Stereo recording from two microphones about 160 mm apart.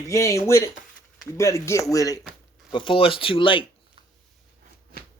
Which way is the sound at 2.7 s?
30° left (ahead or behind).